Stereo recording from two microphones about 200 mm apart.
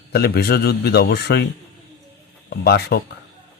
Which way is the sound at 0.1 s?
55° left (ahead or behind).